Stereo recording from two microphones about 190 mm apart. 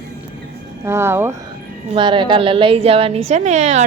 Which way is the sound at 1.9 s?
25° right (ahead or behind).